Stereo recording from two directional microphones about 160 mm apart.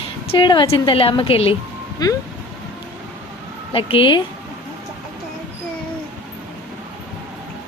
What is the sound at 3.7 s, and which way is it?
Speech, 35° left (ahead or behind).